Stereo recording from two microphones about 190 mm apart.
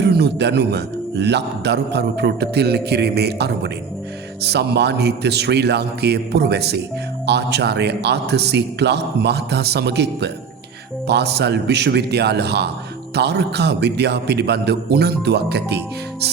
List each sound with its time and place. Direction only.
0.0 s a man's voice: 60° right (ahead or behind)